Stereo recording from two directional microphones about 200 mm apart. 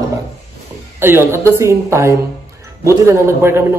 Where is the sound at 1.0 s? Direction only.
10° right (ahead or behind).